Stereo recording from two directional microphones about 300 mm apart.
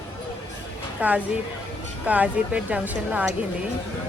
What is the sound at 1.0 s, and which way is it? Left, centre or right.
Speech, centre.